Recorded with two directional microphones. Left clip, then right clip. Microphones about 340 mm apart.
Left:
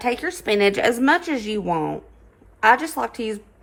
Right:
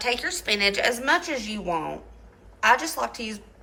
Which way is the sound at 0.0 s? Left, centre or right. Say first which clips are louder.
Left 2 dB; centre.